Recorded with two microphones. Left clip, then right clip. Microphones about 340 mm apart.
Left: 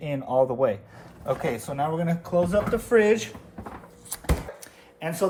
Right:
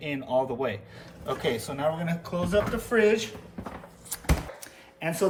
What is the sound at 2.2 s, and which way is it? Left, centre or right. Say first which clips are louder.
Speech: left 3 dB; centre.